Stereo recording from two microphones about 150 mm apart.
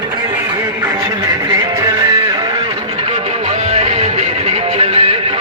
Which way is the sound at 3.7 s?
45° right (ahead or behind).